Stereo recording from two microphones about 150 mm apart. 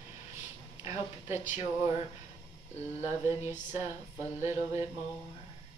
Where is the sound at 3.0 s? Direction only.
15° right (ahead or behind).